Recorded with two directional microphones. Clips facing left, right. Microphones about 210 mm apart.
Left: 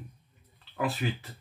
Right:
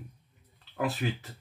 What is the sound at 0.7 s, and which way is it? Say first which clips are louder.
Speech: even; 45° right (ahead or behind).